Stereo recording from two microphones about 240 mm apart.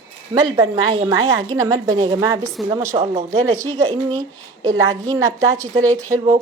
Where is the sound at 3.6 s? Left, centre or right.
Right.